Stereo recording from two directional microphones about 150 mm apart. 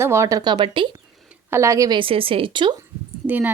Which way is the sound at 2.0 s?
35° right (ahead or behind).